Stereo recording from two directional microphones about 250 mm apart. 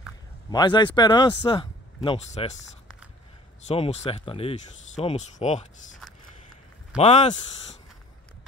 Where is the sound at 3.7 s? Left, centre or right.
Left.